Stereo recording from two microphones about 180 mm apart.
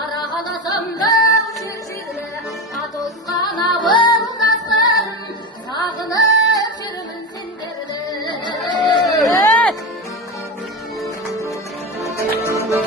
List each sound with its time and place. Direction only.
0.2 s singing: 25° left (ahead or behind)
2.7 s music: centre (ahead or behind)
3.3 s music: 25° left (ahead or behind)
5.7 s singing: 20° left (ahead or behind)
8.2 s a sound: 25° left (ahead or behind)
9.2 s music: 5° left (ahead or behind)
12.0 s music: 15° left (ahead or behind)